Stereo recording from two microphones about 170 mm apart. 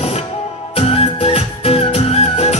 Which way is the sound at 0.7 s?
35° left (ahead or behind).